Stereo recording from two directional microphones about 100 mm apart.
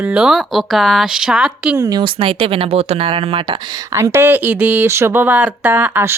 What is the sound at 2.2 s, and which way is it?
Speech, 65° right (ahead or behind).